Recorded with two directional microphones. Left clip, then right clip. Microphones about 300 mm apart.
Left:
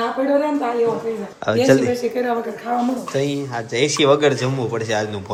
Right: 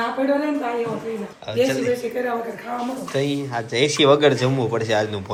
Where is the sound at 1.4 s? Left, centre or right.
Left.